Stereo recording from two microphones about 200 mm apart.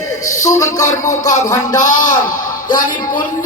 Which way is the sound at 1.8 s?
40° left (ahead or behind).